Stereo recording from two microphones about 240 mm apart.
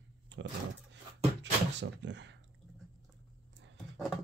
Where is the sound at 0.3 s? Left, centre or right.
Right.